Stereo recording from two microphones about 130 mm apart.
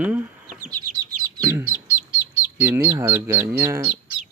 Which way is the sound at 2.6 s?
15° right (ahead or behind).